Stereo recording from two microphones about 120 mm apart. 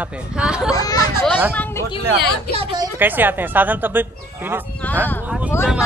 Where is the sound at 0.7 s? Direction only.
30° left (ahead or behind).